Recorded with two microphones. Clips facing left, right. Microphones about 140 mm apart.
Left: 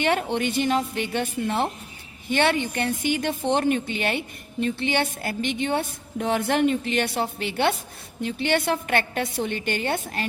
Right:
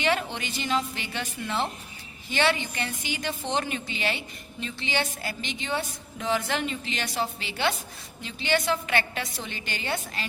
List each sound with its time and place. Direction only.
0.0 s a woman's voice: 55° left (ahead or behind)